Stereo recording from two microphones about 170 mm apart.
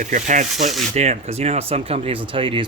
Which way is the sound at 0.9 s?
40° right (ahead or behind).